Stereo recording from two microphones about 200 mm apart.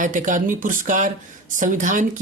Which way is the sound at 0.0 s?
40° right (ahead or behind).